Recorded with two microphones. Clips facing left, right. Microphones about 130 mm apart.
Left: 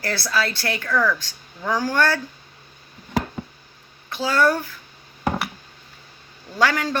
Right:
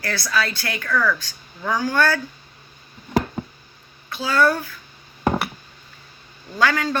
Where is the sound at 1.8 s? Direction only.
35° left (ahead or behind).